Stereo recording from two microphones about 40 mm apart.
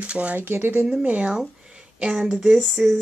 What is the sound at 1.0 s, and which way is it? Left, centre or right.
Speech, right.